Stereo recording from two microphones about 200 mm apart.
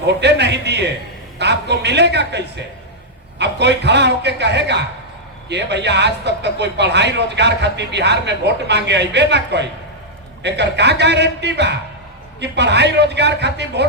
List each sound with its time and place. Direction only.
0.1 s speech: 60° right (ahead or behind)